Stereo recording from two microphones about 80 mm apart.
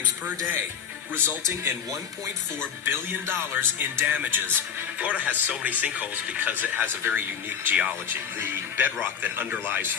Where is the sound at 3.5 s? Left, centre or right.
Right.